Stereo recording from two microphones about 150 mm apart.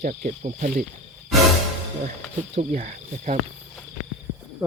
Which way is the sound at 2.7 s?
50° right (ahead or behind).